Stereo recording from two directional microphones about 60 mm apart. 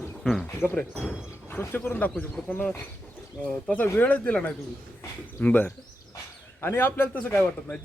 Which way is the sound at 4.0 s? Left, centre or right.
Left.